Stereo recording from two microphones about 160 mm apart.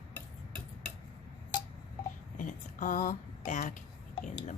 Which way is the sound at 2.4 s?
55° left (ahead or behind).